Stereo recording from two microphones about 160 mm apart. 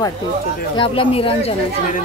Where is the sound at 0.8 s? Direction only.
35° left (ahead or behind).